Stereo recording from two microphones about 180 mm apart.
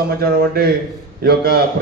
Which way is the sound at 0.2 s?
55° right (ahead or behind).